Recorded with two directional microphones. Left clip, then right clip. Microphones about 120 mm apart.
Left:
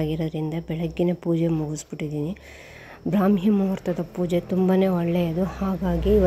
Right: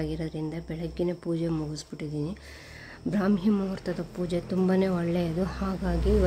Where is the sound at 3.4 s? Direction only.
15° left (ahead or behind).